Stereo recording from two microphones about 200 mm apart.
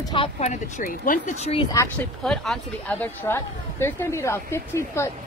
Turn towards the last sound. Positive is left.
turn(degrees=15)  # may be behind; listen again after turning